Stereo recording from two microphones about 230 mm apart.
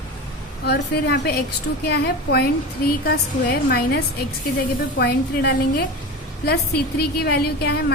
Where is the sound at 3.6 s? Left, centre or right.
Left.